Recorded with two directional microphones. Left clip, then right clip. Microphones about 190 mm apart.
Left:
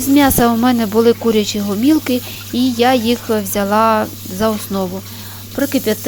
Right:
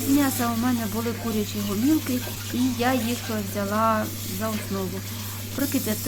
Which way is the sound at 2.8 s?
45° left (ahead or behind).